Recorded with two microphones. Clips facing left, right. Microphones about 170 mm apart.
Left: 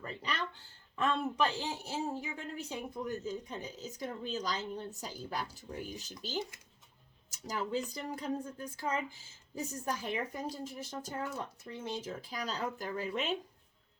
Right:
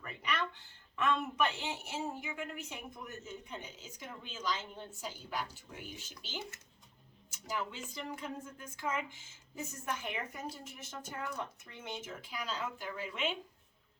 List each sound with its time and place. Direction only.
0.0 s speech: 30° left (ahead or behind)
6.5 s speech: 10° left (ahead or behind)
7.3 s speech: 40° left (ahead or behind)